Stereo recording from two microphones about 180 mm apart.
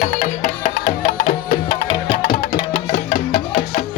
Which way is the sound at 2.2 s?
50° left (ahead or behind).